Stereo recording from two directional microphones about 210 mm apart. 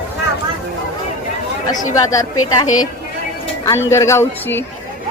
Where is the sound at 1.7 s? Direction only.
15° left (ahead or behind).